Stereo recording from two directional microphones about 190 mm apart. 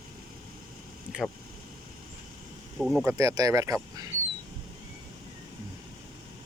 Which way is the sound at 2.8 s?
Centre (ahead or behind).